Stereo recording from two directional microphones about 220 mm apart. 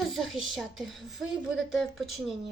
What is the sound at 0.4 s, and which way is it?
Speech, centre (ahead or behind).